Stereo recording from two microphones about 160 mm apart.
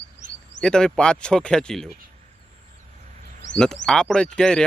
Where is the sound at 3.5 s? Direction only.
5° left (ahead or behind).